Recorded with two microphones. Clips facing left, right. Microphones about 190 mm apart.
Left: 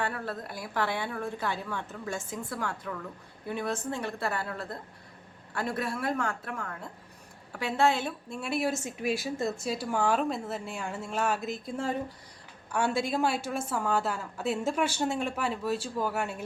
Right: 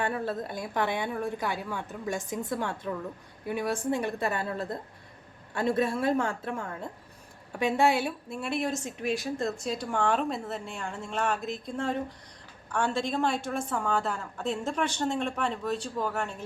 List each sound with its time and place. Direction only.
0.0 s a woman's voice: 20° right (ahead or behind)
3.5 s a woman's voice: 10° right (ahead or behind)
7.6 s speech: 15° right (ahead or behind)
8.4 s a woman's voice: centre (ahead or behind)